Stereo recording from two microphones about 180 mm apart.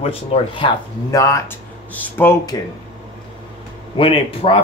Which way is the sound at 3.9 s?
30° left (ahead or behind).